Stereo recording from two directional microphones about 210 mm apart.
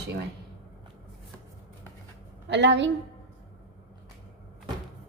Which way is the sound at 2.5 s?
55° right (ahead or behind).